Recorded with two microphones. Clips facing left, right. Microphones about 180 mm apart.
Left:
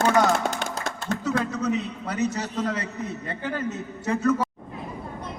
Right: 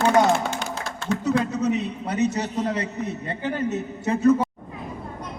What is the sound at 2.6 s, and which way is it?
Speech, 30° right (ahead or behind).